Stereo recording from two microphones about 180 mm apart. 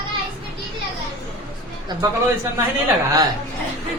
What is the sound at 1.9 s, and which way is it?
Speech, 20° right (ahead or behind).